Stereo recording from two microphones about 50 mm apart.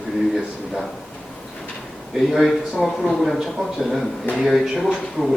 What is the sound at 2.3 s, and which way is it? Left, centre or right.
A man's voice, centre.